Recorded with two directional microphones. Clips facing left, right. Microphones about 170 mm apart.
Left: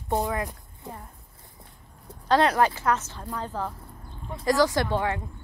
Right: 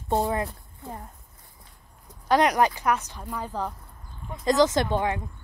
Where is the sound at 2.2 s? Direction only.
15° right (ahead or behind).